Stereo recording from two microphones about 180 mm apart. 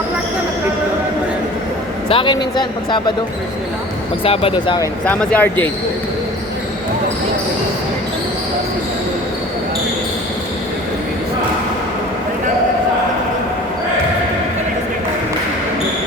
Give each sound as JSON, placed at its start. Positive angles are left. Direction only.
{"t": 2.0, "sound": "speech", "side_deg": 25}
{"t": 4.2, "sound": "speech", "side_deg": 30}
{"t": 5.0, "sound": "a man's voice", "side_deg": 10}